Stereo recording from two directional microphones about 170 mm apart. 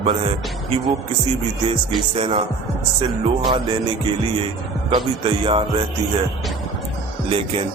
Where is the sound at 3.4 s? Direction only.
30° right (ahead or behind).